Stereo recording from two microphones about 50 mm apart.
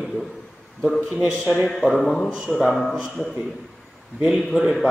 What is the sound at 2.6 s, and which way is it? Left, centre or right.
Speech, centre.